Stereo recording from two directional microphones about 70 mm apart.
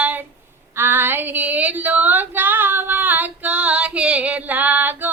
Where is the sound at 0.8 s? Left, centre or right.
Right.